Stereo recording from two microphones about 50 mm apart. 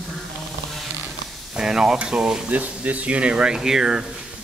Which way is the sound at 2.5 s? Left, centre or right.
Right.